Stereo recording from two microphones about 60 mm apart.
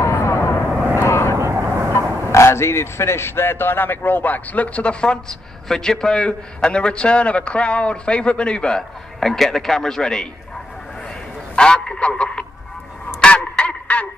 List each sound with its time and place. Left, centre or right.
0.0 s vehicle: left
0.7 s vehicle: right
1.0 s vehicle: left
1.5 s vehicle: right
2.3 s a man's voice: left; by 10.2 s centre
11.5 s a man's voice: centre
13.2 s music: centre